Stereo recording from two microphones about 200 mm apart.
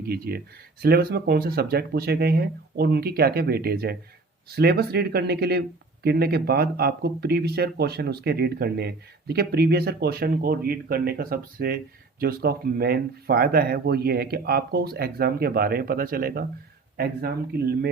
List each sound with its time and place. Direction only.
0.0 s speech: 50° right (ahead or behind)